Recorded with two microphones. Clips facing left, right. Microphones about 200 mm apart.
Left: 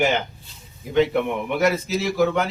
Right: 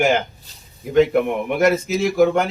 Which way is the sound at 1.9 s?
50° right (ahead or behind).